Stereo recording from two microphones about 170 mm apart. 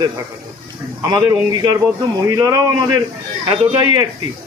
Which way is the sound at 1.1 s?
25° right (ahead or behind).